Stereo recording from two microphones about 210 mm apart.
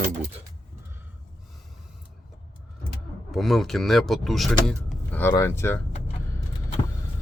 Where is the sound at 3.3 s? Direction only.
Centre (ahead or behind).